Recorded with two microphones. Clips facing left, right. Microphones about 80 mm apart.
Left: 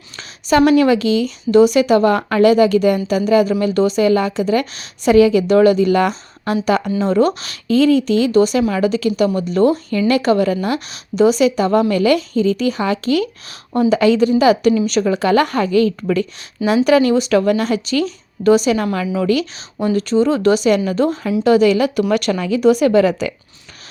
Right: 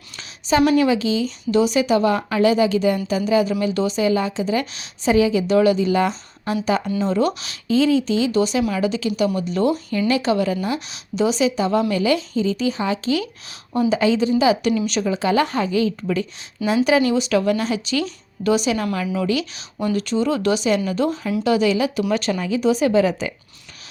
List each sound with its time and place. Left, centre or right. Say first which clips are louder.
0.2 s a woman's voice: left 4 dB; left
5.0 s a woman's voice: left 6 dB; left
7.0 s speech: left 5 dB; left
10.1 s a woman's voice: left 5 dB; left
22.1 s a woman's voice: left 4 dB; left